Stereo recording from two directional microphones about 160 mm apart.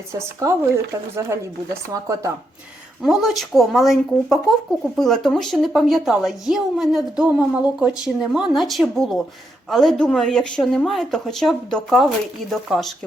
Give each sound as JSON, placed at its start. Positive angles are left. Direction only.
{"t": 0.1, "sound": "speech", "side_deg": -20}
{"t": 3.0, "sound": "a woman's voice", "side_deg": 0}